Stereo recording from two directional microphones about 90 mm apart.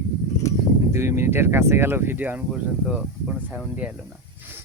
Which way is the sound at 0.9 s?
30° right (ahead or behind).